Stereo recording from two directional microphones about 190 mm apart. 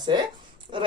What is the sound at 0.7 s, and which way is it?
Speech, 35° right (ahead or behind).